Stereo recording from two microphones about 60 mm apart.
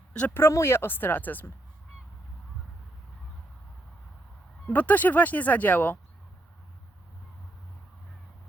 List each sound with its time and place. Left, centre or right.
0.1 s speech: left
0.5 s speech: left
4.6 s speech: left